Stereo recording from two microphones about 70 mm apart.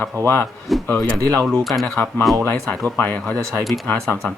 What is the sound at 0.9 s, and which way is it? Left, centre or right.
Speech, left.